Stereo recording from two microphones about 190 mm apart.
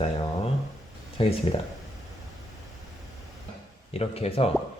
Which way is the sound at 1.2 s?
30° left (ahead or behind).